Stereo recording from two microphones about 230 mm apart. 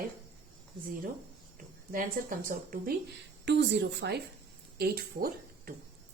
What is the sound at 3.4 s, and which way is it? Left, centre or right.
A woman's voice, right.